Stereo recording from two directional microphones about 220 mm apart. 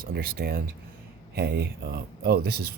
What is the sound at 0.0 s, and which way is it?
Speech, 45° right (ahead or behind).